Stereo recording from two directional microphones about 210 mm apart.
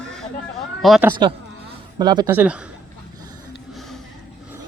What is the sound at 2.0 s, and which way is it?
Speech, 20° right (ahead or behind).